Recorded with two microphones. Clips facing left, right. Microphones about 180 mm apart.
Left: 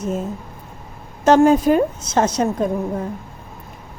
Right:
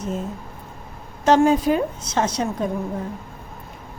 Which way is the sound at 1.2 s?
50° left (ahead or behind).